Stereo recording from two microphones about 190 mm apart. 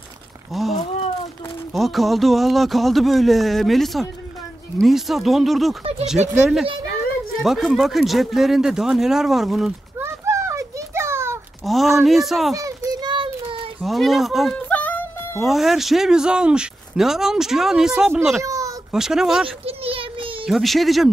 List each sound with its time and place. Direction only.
0.5 s speech: centre (ahead or behind)
11.6 s speech: centre (ahead or behind)
12.5 s children playing: 20° right (ahead or behind)
13.7 s music: centre (ahead or behind)
15.5 s speech: centre (ahead or behind)
18.4 s a sound: 15° right (ahead or behind)
18.9 s speech: 5° right (ahead or behind)
19.6 s a sound: 30° right (ahead or behind)
20.4 s speech: centre (ahead or behind)